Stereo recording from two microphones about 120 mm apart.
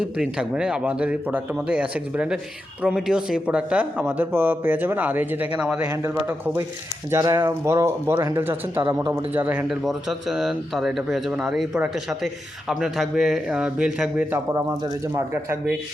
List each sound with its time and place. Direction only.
0.2 s speech: 5° right (ahead or behind)
5.9 s speech: 20° right (ahead or behind)
7.1 s speech: 30° right (ahead or behind); by 14.3 s 5° right (ahead or behind)
14.3 s speech: 25° right (ahead or behind)